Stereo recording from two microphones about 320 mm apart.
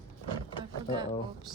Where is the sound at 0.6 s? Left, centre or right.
Centre.